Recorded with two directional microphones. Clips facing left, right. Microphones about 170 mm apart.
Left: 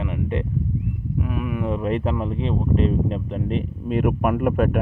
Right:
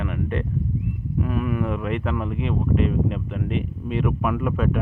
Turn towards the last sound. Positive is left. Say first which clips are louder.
# left 3 dB
turn(degrees=55)  # may be behind; listen again after turning